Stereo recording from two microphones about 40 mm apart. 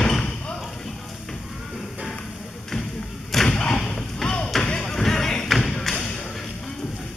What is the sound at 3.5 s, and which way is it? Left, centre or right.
Thump, centre.